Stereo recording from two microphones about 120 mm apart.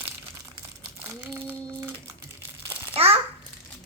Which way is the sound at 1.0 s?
25° right (ahead or behind).